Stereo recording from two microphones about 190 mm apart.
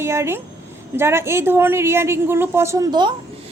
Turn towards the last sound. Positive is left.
turn(degrees=-25)  # may be behind; listen again after turning